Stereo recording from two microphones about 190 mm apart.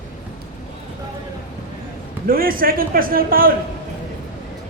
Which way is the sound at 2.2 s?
50° right (ahead or behind).